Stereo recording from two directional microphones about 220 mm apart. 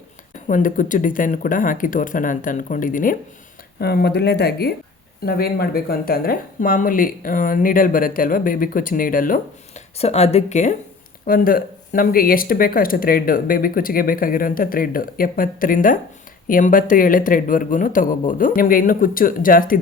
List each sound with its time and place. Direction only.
0.4 s speech: 35° left (ahead or behind)